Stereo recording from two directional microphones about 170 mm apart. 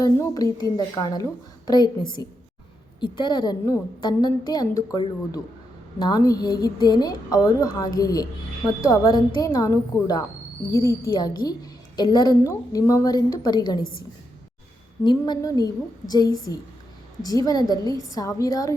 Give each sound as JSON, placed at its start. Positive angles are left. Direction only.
{"t": 0.0, "sound": "a woman's voice", "side_deg": 20}
{"t": 15.2, "sound": "a woman's voice", "side_deg": 20}